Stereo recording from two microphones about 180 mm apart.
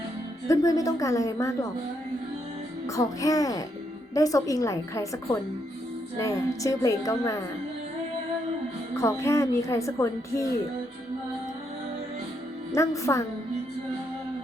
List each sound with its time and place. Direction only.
0.4 s a woman's voice: 20° left (ahead or behind)
2.8 s a woman's voice: 20° left (ahead or behind)
9.0 s a woman's voice: 15° left (ahead or behind)
12.7 s a woman's voice: 15° left (ahead or behind)